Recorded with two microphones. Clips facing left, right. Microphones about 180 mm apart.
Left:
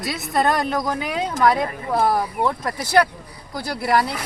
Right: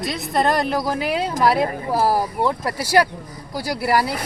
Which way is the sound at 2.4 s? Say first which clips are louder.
Right 1 dB; 10° right (ahead or behind).